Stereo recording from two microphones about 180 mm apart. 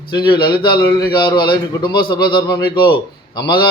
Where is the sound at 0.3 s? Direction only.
60° left (ahead or behind).